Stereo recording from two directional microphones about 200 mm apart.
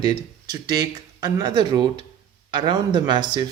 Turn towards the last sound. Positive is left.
turn(degrees=-20)  # may be behind; listen again after turning